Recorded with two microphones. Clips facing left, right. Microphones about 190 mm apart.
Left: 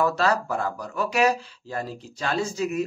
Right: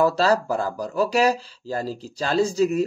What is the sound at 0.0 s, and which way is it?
Speech, 35° right (ahead or behind).